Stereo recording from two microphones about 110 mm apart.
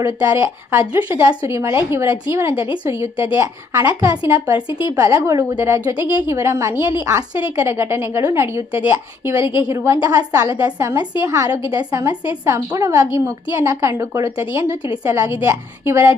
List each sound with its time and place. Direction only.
0.0 s a woman's voice: 30° right (ahead or behind)